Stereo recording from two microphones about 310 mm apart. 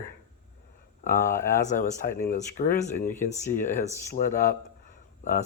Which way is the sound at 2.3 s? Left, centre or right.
Left.